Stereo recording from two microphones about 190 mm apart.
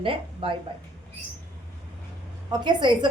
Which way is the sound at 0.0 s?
25° right (ahead or behind).